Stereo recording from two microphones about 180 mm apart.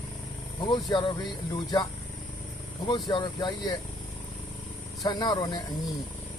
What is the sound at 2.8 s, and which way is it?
Speech, 25° left (ahead or behind).